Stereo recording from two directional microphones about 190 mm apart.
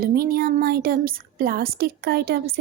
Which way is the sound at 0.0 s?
50° right (ahead or behind).